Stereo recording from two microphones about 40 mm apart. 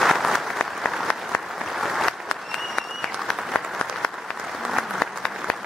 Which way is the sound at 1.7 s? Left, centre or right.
Centre.